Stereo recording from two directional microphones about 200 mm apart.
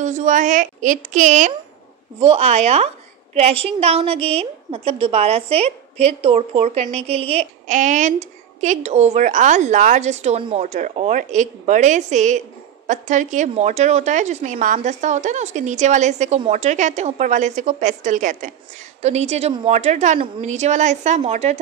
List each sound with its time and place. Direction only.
0.0 s a woman's voice: 35° right (ahead or behind)